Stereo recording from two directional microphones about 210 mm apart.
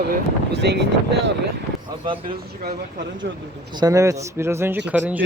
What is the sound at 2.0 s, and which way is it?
Speech, 25° right (ahead or behind).